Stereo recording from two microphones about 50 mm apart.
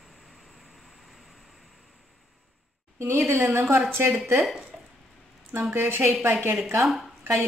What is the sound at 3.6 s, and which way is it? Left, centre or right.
Speech, right.